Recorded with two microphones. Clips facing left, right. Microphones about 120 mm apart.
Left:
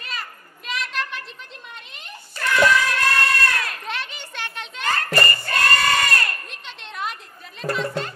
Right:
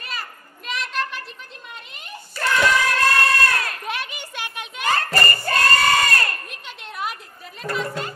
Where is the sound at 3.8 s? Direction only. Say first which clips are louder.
Right 2 dB; 10° right (ahead or behind).